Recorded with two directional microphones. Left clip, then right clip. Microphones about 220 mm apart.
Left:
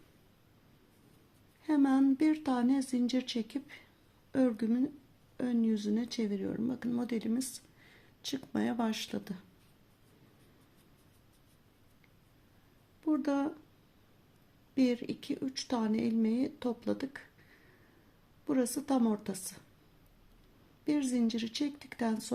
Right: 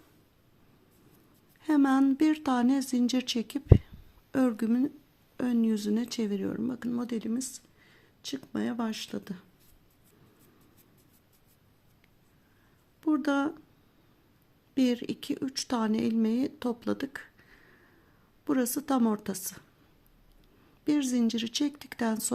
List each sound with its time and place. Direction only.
1.6 s speech: 25° right (ahead or behind)
13.0 s speech: 30° right (ahead or behind)
14.8 s speech: 25° right (ahead or behind)
18.4 s speech: 25° right (ahead or behind)
20.8 s speech: 25° right (ahead or behind)